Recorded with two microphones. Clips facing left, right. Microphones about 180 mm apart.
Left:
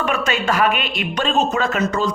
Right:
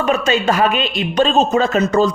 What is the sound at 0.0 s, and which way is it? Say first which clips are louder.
Speech: right 5 dB; 25° right (ahead or behind).